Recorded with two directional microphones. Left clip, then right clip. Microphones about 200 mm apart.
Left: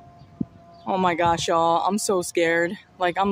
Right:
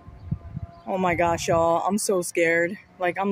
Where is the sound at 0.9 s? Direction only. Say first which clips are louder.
Left 2 dB; 10° left (ahead or behind).